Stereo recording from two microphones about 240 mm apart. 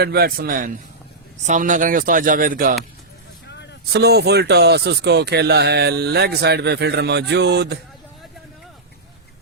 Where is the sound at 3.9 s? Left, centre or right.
Right.